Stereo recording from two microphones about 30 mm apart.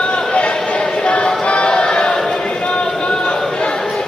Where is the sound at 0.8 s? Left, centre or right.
Left.